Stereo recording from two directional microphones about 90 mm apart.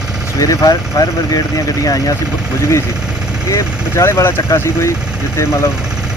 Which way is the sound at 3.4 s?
35° left (ahead or behind).